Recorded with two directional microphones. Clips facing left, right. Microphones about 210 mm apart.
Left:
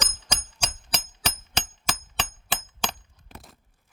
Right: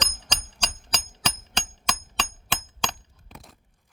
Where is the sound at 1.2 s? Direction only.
5° left (ahead or behind).